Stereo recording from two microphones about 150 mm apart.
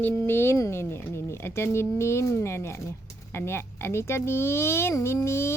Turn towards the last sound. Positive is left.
turn(degrees=15)  # may be behind; listen again after turning